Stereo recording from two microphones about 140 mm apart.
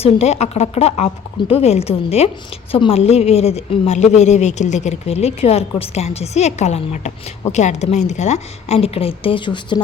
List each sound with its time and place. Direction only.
0.0 s speech: 50° left (ahead or behind); by 9.8 s 35° left (ahead or behind)